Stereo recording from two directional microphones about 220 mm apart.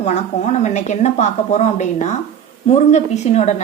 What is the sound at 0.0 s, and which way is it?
A woman's voice, 30° left (ahead or behind).